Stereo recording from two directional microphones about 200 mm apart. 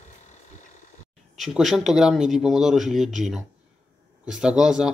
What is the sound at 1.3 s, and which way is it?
Speech, centre (ahead or behind).